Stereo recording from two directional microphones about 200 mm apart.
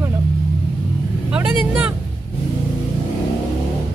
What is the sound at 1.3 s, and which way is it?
Speech, 5° right (ahead or behind).